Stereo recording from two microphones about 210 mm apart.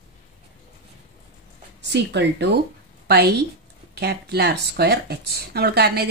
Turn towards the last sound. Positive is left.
turn(degrees=-50)  # may be behind; listen again after turning